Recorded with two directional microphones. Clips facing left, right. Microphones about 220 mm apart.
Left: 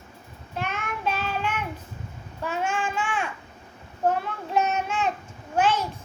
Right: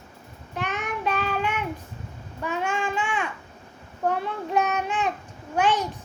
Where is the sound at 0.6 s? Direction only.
15° right (ahead or behind).